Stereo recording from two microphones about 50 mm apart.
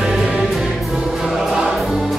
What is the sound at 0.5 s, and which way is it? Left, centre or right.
Music, centre.